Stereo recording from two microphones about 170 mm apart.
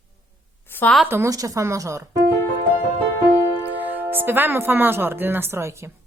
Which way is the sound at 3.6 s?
10° right (ahead or behind).